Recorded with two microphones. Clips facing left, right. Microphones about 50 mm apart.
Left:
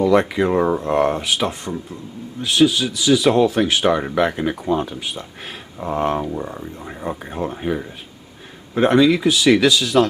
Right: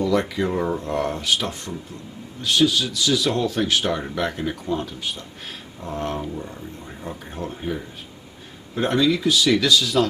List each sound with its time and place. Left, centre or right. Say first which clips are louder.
0.3 s speech: left 6 dB; left